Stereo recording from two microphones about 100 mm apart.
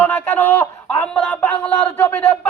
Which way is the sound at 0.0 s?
15° left (ahead or behind).